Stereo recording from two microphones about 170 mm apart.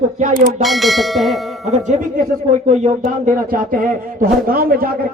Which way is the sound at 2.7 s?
40° right (ahead or behind).